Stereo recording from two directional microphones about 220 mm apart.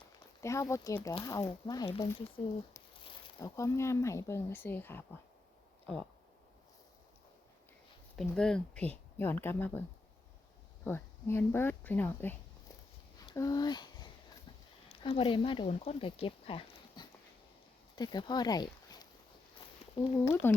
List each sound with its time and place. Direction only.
0.4 s speech: 15° left (ahead or behind)
8.1 s speech: centre (ahead or behind)
10.8 s speech: 10° left (ahead or behind)
13.2 s a sound: 15° left (ahead or behind)
14.8 s speech: 25° left (ahead or behind)